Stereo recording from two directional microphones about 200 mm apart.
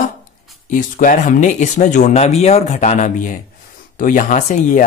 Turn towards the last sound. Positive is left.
turn(degrees=40)  # may be behind; listen again after turning